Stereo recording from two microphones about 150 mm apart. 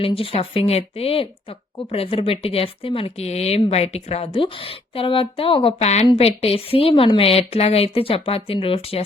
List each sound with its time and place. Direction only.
0.0 s speech: 40° left (ahead or behind)